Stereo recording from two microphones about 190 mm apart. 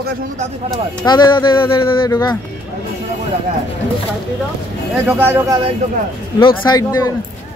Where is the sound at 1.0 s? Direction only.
20° left (ahead or behind).